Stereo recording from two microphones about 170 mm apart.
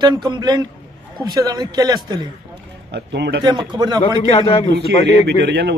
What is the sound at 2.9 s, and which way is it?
Speech, 85° right.